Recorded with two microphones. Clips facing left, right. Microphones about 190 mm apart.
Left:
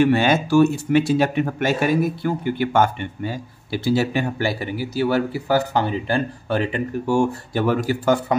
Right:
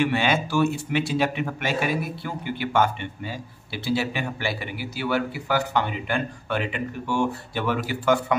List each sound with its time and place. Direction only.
0.0 s speech: 45° left (ahead or behind)